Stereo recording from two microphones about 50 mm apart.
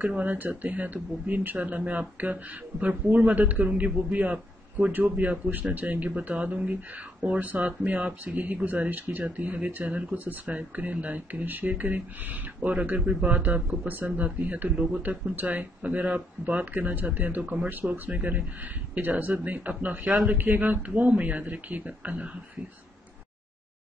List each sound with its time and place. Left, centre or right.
0.0 s speech: right
7.2 s speech: right
13.7 s speech: right